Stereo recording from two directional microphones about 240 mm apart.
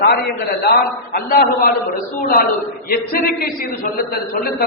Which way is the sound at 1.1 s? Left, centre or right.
Left.